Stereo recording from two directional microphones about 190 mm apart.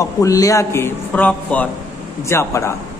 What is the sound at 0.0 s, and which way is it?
A man's voice, 15° left (ahead or behind).